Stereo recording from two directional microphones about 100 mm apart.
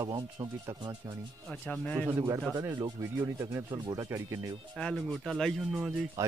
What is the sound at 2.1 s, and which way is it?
Speech, 25° right (ahead or behind).